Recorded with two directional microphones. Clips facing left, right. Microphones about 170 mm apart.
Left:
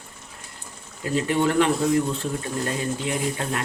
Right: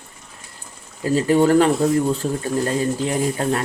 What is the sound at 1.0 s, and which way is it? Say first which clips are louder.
Speech: right 6 dB; 35° right (ahead or behind).